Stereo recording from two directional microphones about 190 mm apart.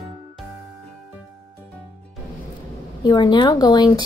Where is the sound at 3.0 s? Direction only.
25° left (ahead or behind).